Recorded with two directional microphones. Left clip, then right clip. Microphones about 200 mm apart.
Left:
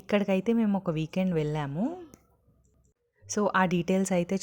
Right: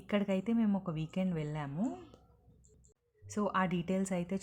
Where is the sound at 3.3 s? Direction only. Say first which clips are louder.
Left 8 dB; 35° left (ahead or behind).